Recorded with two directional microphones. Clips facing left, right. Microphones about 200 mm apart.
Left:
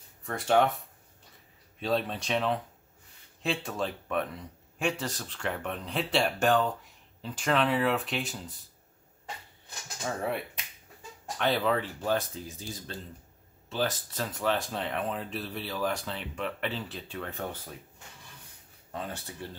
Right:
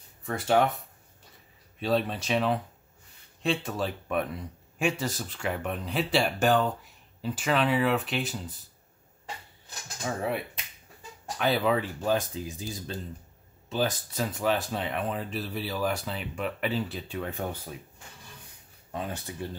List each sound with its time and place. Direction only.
0.3 s speech: centre (ahead or behind)
1.8 s speech: centre (ahead or behind)
10.0 s speech: 5° right (ahead or behind)
19.4 s speech: 15° right (ahead or behind)